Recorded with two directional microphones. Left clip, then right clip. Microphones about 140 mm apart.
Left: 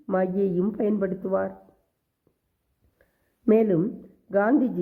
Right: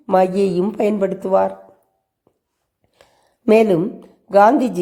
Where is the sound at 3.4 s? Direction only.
25° right (ahead or behind).